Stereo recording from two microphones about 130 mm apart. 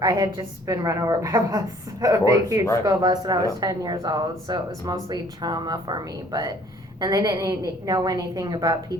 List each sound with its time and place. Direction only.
0.0 s a woman's voice: 25° right (ahead or behind)